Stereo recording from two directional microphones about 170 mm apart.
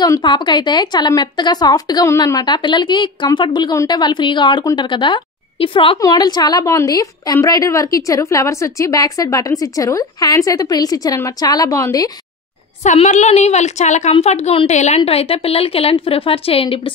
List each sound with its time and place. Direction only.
0.0 s a woman's voice: 25° left (ahead or behind)
12.8 s a woman's voice: 45° left (ahead or behind)